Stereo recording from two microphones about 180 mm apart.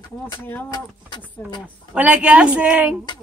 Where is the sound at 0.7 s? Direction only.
25° left (ahead or behind).